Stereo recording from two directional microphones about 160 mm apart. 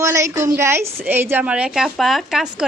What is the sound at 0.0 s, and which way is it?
A woman's voice, 20° right (ahead or behind).